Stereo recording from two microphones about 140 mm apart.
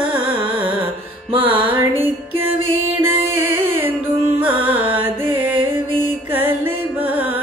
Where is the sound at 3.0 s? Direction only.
15° right (ahead or behind).